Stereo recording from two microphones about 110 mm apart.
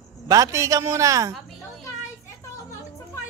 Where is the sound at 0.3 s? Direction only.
30° right (ahead or behind).